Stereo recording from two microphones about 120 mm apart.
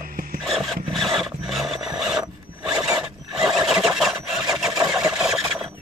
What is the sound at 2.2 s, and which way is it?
Wood, 30° right (ahead or behind).